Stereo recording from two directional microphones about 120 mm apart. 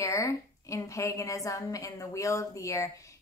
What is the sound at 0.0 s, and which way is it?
A woman's voice, 25° left (ahead or behind).